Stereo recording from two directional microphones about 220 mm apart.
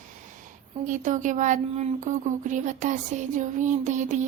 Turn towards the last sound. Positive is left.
turn(degrees=-35)  # may be behind; listen again after turning